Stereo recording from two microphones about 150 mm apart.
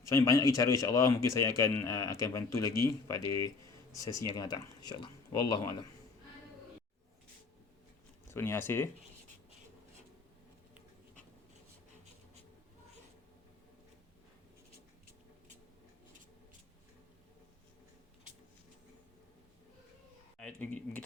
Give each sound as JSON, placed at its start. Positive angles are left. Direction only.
{"t": 0.1, "sound": "speech", "side_deg": 20}
{"t": 8.3, "sound": "speech", "side_deg": 15}
{"t": 20.4, "sound": "speech", "side_deg": 5}